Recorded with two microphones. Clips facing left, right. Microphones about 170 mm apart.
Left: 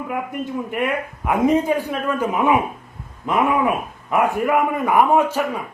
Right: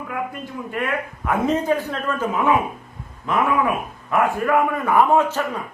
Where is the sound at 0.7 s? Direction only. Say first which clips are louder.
Right 1 dB; 20° left (ahead or behind).